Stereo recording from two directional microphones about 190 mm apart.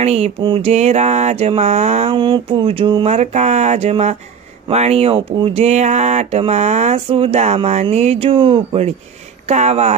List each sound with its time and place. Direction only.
0.0 s speech: 35° right (ahead or behind)